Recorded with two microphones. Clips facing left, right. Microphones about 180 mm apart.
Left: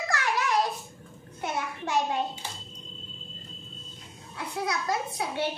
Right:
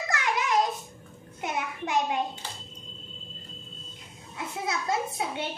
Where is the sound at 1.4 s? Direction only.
20° right (ahead or behind).